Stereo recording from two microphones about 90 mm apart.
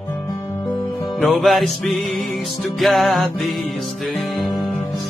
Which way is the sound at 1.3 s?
Centre (ahead or behind).